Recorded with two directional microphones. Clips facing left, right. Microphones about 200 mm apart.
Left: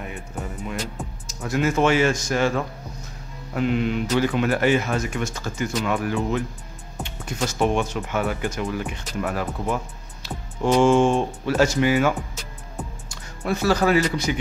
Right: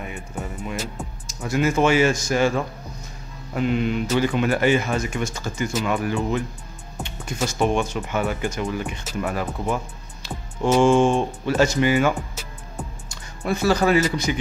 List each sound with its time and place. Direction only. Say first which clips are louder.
0.4 s music: right 1 dB; 5° right (ahead or behind)
1.4 s speech: right 1 dB; centre (ahead or behind)
7.0 s music: right 1 dB; centre (ahead or behind)
7.4 s speech: even; centre (ahead or behind)
10.8 s speech: even; 5° left (ahead or behind)